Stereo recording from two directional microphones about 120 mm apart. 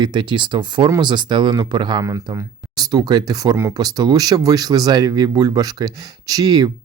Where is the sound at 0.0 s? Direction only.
40° right (ahead or behind).